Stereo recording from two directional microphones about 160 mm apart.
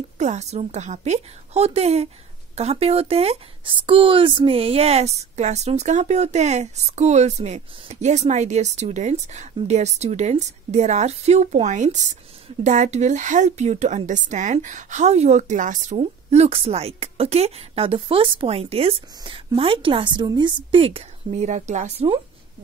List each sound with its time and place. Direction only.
0.2 s a woman's voice: 45° right (ahead or behind)